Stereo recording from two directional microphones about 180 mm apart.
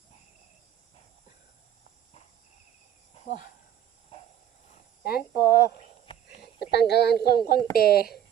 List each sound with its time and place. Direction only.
3.2 s speech: 45° left (ahead or behind)
5.0 s speech: 60° left (ahead or behind)